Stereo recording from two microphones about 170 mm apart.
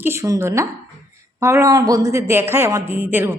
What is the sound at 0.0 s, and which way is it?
A woman's voice, 15° right (ahead or behind).